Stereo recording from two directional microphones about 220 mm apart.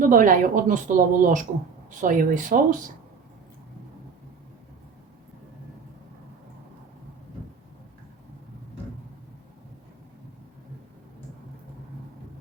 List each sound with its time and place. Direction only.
0.1 s speech: 35° right (ahead or behind)